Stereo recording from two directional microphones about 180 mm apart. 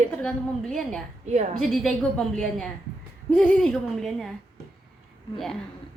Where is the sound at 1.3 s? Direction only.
40° right (ahead or behind).